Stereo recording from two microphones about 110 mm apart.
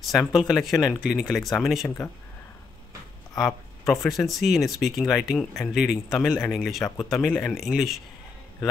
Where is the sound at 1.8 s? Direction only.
20° left (ahead or behind).